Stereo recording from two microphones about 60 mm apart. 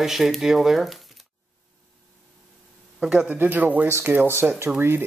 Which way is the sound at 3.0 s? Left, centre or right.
Centre.